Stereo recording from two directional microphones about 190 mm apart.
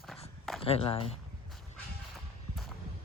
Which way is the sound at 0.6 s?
30° left (ahead or behind).